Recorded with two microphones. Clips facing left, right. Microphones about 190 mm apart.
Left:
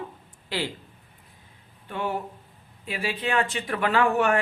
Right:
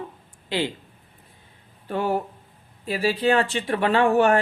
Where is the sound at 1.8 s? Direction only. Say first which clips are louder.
Right 5 dB; 40° right (ahead or behind).